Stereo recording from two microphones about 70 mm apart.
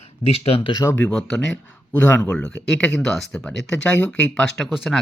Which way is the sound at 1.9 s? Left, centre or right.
Centre.